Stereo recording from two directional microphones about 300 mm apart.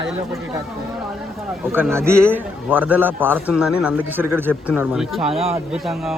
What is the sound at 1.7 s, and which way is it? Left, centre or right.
A man's voice, centre.